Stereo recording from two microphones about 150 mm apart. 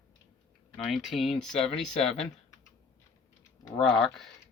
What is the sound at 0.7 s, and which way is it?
Speech, centre (ahead or behind).